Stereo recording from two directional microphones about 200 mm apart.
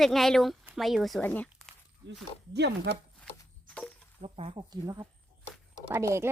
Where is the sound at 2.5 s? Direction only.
60° right (ahead or behind).